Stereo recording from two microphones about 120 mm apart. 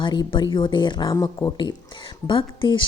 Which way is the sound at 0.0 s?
40° left (ahead or behind).